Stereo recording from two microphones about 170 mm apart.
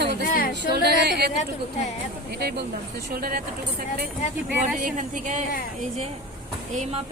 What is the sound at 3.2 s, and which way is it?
Speech, 60° right (ahead or behind).